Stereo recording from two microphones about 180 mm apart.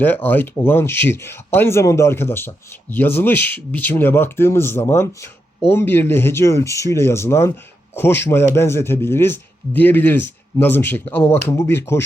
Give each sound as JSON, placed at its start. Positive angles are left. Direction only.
{"t": 0.0, "sound": "a man's voice", "side_deg": 10}